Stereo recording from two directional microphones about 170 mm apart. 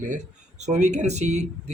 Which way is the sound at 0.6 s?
45° right (ahead or behind).